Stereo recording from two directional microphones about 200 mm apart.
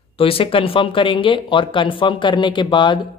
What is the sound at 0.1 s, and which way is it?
Speech, 30° left (ahead or behind).